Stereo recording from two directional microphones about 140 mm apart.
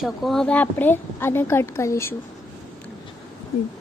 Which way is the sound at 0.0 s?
Centre (ahead or behind).